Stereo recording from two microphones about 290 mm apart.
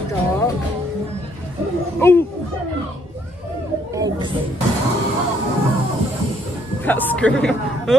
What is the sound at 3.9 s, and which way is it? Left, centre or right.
Speech, centre.